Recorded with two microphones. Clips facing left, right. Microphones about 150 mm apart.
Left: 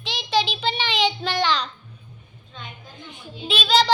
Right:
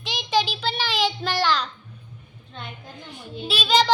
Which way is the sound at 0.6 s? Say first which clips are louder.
Left 1 dB; 5° right (ahead or behind).